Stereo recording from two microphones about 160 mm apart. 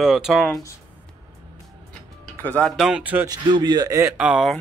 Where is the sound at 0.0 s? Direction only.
Centre (ahead or behind).